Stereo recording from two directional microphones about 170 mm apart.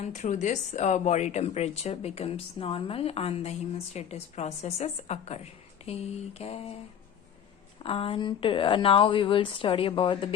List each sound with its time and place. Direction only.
0.0 s speech: 45° left (ahead or behind)
7.9 s speech: 30° left (ahead or behind)